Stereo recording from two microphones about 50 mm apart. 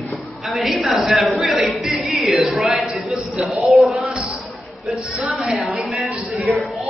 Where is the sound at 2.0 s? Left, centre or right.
Centre.